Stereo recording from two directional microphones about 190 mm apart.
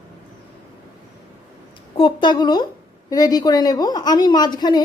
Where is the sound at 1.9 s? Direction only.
25° left (ahead or behind).